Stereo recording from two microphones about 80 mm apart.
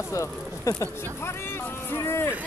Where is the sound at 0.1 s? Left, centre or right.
Left.